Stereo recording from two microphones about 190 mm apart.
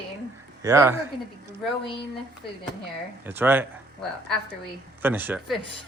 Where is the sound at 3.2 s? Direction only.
10° right (ahead or behind).